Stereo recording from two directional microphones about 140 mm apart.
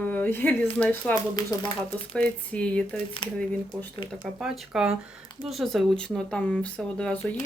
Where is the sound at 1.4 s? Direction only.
25° left (ahead or behind).